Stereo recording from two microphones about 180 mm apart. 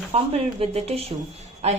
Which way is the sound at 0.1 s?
35° right (ahead or behind).